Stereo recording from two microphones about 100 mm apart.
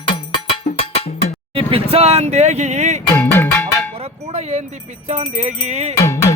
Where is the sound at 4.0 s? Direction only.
90° right.